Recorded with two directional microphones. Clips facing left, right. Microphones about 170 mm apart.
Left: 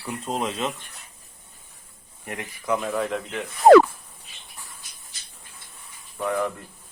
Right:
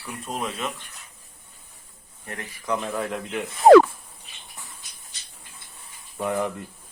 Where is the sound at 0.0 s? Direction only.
25° left (ahead or behind).